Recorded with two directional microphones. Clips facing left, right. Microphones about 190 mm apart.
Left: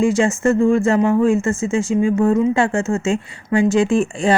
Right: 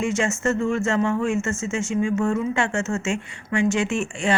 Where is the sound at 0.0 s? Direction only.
35° left (ahead or behind).